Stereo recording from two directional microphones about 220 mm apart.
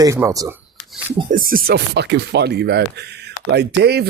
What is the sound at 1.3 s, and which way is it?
Speech, 40° right (ahead or behind).